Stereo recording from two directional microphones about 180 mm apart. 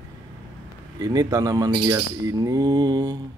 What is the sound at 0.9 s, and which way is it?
Bird, 20° right (ahead or behind).